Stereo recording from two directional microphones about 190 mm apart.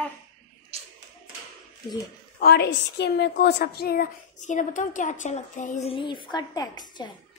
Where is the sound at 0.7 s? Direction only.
30° right (ahead or behind).